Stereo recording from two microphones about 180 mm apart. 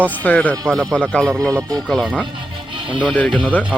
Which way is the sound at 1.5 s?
20° right (ahead or behind).